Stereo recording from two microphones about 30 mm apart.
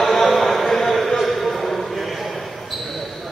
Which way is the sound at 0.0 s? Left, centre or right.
Centre.